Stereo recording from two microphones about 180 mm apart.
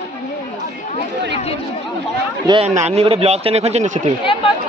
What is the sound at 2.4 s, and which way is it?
Speech, 30° right (ahead or behind).